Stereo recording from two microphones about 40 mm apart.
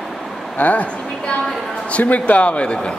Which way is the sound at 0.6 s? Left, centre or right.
Left.